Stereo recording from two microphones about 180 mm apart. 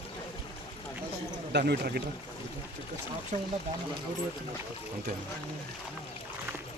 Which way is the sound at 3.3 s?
45° right (ahead or behind).